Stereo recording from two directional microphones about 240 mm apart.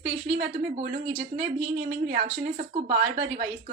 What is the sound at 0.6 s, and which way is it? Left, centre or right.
A woman's voice, right.